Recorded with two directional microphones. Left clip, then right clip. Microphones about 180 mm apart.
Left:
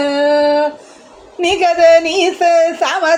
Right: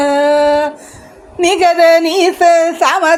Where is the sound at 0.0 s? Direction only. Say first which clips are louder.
Right 2 dB; 35° right (ahead or behind).